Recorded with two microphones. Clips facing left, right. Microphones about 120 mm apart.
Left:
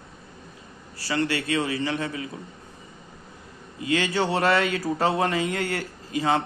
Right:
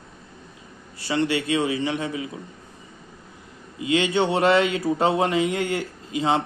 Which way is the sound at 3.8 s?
20° right (ahead or behind).